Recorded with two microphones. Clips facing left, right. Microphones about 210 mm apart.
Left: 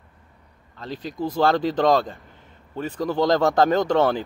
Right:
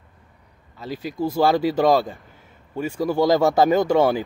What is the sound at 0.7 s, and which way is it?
A man's voice, 10° right (ahead or behind).